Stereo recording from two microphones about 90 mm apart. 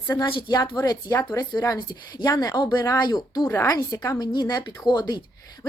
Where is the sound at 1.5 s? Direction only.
50° left (ahead or behind).